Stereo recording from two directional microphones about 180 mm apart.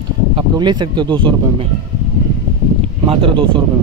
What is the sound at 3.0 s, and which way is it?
Speech, 30° right (ahead or behind).